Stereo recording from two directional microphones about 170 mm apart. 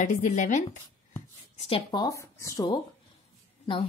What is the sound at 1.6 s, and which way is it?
Speech, 35° left (ahead or behind).